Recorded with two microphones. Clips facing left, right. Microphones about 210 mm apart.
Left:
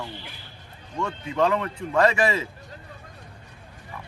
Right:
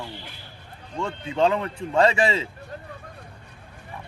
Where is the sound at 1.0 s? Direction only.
25° right (ahead or behind).